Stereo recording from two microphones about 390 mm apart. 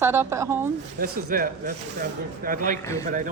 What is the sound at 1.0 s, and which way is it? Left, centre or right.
Speech, right.